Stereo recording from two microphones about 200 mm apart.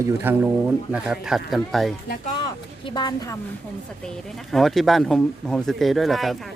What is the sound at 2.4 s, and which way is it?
Speech, 25° left (ahead or behind).